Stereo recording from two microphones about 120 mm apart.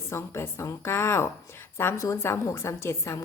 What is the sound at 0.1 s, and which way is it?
A woman's voice, 20° left (ahead or behind).